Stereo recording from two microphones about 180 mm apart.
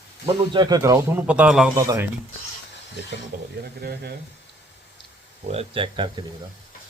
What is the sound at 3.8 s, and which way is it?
Speech, 60° right (ahead or behind).